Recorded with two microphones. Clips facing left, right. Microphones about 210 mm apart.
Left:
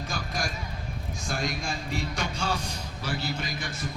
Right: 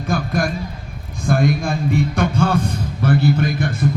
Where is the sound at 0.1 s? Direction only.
55° right (ahead or behind).